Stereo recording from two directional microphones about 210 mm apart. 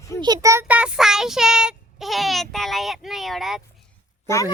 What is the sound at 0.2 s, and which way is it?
Child singing, 15° right (ahead or behind).